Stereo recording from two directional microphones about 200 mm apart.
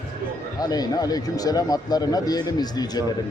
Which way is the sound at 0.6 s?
20° left (ahead or behind).